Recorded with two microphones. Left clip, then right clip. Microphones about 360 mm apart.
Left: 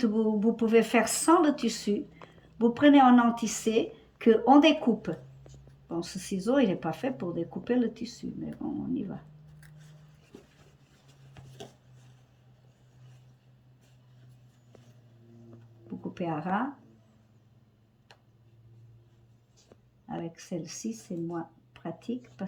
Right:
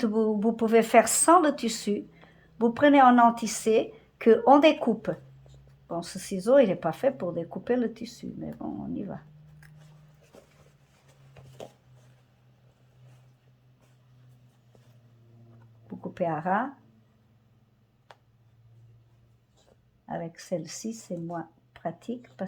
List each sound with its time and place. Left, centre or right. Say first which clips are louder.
0.0 s a woman's voice: right 2 dB; centre
15.9 s a sound: right 5 dB; centre
20.1 s a woman's voice: right 5 dB; centre